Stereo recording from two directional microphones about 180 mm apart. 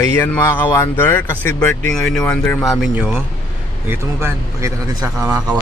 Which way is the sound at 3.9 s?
15° right (ahead or behind).